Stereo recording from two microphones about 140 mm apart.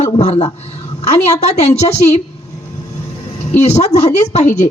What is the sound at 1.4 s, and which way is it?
Speech, 50° left (ahead or behind).